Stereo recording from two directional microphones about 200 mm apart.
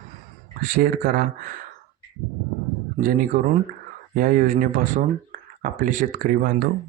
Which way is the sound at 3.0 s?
45° right (ahead or behind).